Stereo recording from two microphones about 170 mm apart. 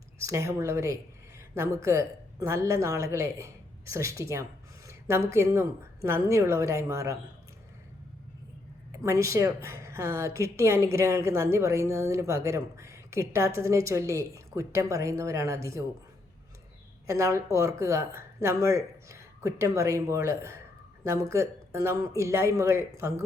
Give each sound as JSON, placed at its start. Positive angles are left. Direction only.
{"t": 0.2, "sound": "speech", "side_deg": -15}
{"t": 4.9, "sound": "a sound", "side_deg": -15}
{"t": 5.3, "sound": "speech", "side_deg": -15}
{"t": 9.0, "sound": "speech", "side_deg": -15}
{"t": 17.1, "sound": "speech", "side_deg": -15}